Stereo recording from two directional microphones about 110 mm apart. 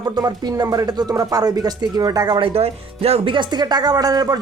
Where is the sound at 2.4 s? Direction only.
65° right (ahead or behind).